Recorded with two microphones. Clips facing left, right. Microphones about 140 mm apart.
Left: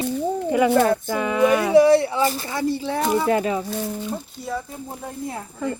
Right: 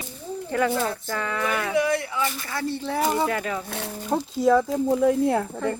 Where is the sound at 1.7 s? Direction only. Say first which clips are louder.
Left 10 dB; 30° left (ahead or behind).